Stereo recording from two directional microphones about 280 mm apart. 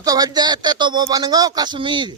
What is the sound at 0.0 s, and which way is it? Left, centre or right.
Speech, centre.